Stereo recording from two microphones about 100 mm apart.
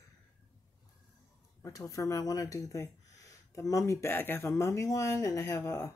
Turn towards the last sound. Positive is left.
turn(degrees=30)  # may be behind; listen again after turning